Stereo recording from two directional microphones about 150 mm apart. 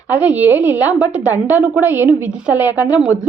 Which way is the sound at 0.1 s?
10° right (ahead or behind).